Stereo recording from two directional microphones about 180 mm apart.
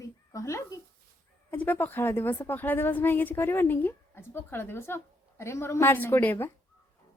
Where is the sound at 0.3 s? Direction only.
15° left (ahead or behind).